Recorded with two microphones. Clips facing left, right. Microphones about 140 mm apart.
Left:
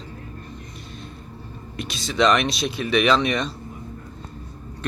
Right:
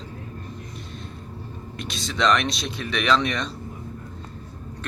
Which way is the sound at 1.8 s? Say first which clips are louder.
Left 4 dB; 5° left (ahead or behind).